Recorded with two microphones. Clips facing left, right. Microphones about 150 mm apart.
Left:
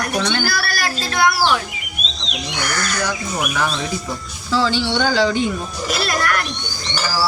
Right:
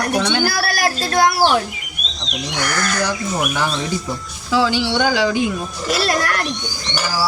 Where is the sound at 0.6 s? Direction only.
40° right (ahead or behind).